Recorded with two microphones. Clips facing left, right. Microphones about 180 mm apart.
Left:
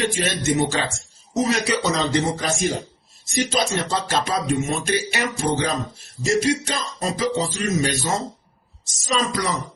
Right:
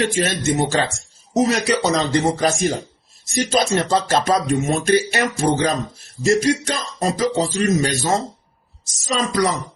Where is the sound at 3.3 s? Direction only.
45° right (ahead or behind).